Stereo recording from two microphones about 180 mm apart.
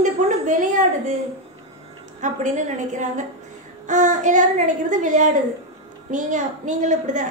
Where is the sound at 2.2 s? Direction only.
45° right (ahead or behind).